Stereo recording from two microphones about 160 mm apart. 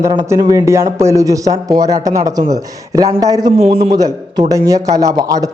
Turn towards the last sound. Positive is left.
turn(degrees=-25)  # may be behind; listen again after turning